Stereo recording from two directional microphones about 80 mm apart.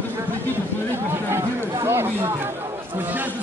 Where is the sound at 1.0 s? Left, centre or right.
Right.